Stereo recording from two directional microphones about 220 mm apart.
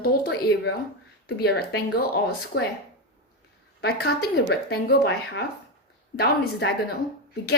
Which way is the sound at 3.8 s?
45° left (ahead or behind).